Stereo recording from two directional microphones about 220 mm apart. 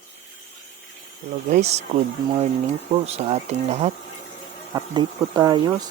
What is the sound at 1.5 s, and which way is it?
Speech, 30° right (ahead or behind).